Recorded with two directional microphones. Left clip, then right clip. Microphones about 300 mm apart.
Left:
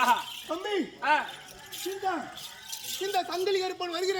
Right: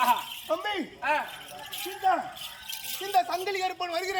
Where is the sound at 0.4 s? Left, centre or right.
Centre.